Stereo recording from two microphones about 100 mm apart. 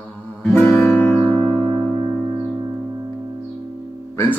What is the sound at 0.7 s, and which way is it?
Music, 5° left (ahead or behind).